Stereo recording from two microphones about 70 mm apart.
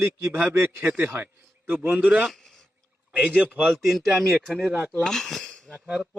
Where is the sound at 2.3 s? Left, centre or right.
Centre.